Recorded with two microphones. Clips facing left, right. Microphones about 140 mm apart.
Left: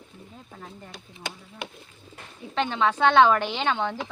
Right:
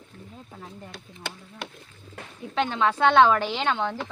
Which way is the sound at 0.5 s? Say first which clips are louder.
Even; 5° right (ahead or behind).